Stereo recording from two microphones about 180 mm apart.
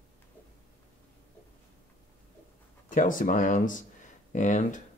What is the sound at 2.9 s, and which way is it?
Speech, 45° left (ahead or behind).